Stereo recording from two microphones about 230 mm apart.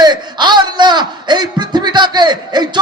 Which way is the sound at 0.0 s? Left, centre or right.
Centre.